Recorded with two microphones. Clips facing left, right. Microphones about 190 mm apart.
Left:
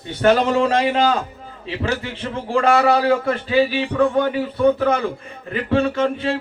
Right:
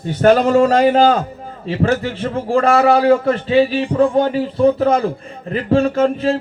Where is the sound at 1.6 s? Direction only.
50° right (ahead or behind).